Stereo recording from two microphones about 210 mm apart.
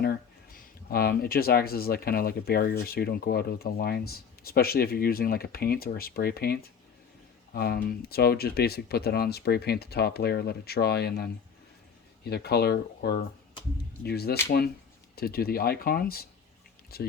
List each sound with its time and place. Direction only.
0.0 s speech: 45° left (ahead or behind)